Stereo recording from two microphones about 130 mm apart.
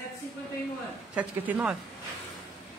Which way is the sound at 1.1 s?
10° right (ahead or behind).